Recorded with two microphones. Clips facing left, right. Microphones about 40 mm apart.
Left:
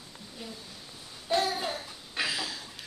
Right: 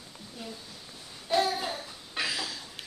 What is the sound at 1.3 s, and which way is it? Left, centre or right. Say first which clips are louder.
Babbling: right 1 dB; centre.